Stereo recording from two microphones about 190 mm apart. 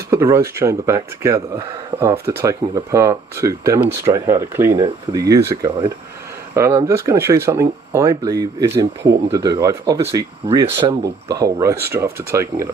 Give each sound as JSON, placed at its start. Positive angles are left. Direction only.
{"t": 0.1, "sound": "speech", "side_deg": -15}